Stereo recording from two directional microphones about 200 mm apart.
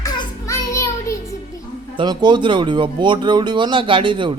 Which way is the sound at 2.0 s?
20° right (ahead or behind).